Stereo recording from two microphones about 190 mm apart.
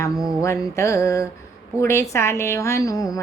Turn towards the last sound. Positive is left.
turn(degrees=15)  # may be behind; listen again after turning